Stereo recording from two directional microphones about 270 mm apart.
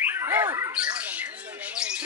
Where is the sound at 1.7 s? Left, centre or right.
Centre.